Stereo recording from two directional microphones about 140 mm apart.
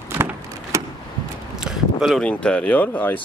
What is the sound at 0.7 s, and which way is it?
Vehicle, 20° right (ahead or behind).